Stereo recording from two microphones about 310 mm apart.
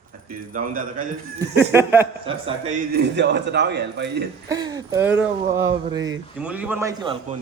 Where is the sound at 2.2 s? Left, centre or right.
Centre.